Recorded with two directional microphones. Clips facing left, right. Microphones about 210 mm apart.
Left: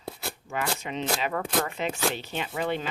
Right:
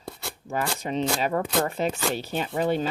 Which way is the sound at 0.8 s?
40° right (ahead or behind).